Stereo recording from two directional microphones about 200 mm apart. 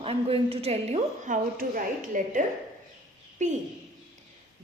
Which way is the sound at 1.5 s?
45° right (ahead or behind).